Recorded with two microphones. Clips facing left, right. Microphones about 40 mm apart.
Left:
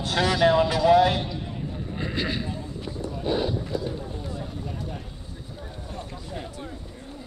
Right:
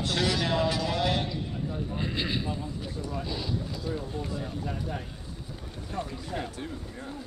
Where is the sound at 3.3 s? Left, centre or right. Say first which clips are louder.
Left 9 dB; left.